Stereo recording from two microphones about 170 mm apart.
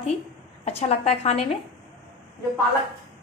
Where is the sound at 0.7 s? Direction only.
40° left (ahead or behind).